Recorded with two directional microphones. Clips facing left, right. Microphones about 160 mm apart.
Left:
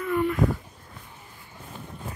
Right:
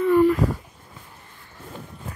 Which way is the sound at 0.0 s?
35° right (ahead or behind).